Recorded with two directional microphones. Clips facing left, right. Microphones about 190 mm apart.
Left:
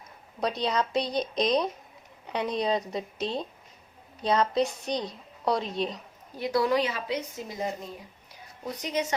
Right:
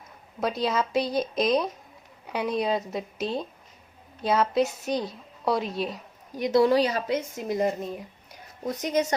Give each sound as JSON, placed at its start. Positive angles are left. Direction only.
{"t": 0.3, "sound": "a woman's voice", "side_deg": 0}
{"t": 6.4, "sound": "speech", "side_deg": -25}
{"t": 7.4, "sound": "a woman's voice", "side_deg": -55}
{"t": 8.8, "sound": "a woman's voice", "side_deg": -45}